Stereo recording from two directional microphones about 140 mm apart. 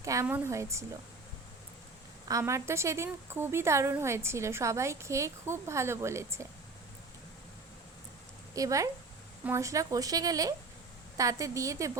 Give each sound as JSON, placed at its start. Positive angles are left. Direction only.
{"t": 0.0, "sound": "a woman's voice", "side_deg": -20}
{"t": 2.4, "sound": "a woman's voice", "side_deg": -20}
{"t": 8.5, "sound": "a woman's voice", "side_deg": -25}